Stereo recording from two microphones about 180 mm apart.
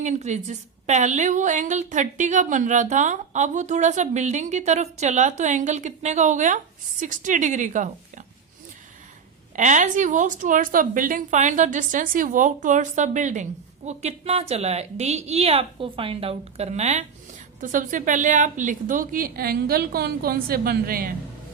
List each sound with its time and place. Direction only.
0.0 s a woman's voice: 40° right (ahead or behind)
9.6 s a woman's voice: 45° right (ahead or behind)